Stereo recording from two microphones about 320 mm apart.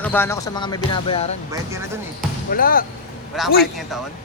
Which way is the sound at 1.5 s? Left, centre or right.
Centre.